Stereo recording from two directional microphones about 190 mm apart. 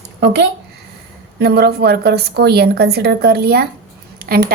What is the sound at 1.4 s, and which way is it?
A woman's voice, 60° right (ahead or behind).